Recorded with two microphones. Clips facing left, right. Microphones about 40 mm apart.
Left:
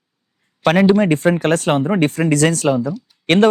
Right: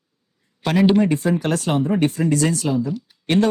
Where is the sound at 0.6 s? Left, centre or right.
Left.